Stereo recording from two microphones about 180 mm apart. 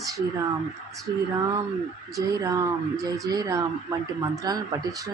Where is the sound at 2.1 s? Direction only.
20° right (ahead or behind).